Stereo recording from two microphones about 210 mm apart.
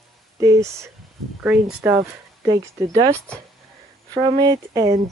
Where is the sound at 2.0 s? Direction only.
20° right (ahead or behind).